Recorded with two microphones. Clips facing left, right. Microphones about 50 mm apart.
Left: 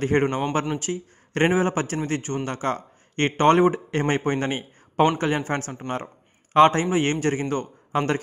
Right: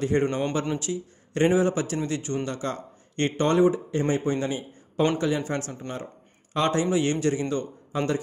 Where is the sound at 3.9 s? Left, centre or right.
Left.